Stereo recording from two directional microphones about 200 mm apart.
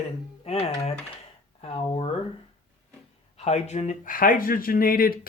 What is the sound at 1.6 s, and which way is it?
Speech, 30° left (ahead or behind).